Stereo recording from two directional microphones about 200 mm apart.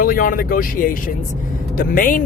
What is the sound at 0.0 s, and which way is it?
Speech, 45° left (ahead or behind).